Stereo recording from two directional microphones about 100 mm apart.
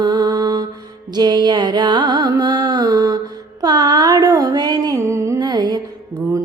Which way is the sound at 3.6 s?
40° right (ahead or behind).